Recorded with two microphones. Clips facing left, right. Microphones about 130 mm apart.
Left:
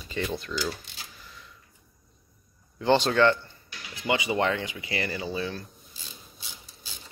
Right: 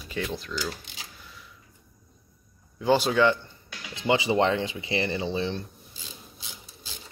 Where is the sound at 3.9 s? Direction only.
25° right (ahead or behind).